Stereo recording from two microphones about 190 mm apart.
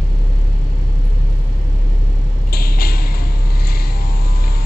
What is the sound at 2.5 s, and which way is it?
Creak, 50° left (ahead or behind).